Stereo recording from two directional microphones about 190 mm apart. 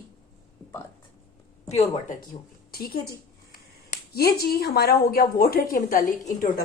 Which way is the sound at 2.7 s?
50° left (ahead or behind).